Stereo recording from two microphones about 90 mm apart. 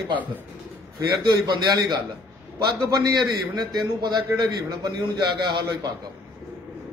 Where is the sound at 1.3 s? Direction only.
50° right (ahead or behind).